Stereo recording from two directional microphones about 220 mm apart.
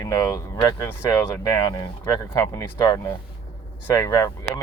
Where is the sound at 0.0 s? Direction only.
15° left (ahead or behind).